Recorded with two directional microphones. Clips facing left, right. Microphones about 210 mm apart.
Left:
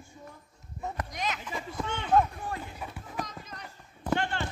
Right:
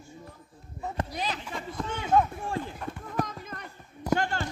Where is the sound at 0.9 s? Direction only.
30° right (ahead or behind).